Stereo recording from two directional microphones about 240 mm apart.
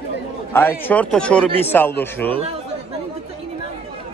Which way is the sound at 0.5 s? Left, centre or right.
Centre.